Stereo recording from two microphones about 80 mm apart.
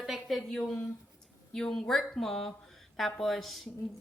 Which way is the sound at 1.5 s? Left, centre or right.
Centre.